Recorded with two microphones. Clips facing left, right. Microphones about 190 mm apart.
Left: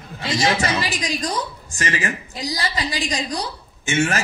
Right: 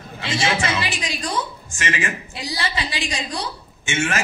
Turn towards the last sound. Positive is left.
turn(degrees=40)  # may be behind; listen again after turning